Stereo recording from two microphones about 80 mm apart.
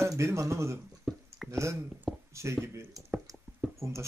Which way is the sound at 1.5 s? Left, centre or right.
Right.